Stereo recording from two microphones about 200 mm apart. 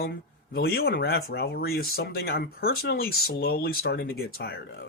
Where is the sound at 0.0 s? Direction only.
50° left (ahead or behind).